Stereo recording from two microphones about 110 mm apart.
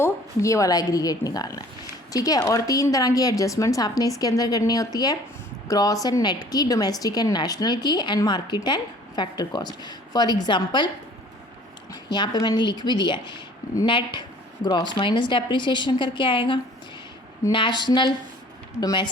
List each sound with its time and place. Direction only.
0.0 s a woman's voice: 30° left (ahead or behind); by 10.8 s 45° left (ahead or behind)
11.9 s a woman's voice: 40° left (ahead or behind)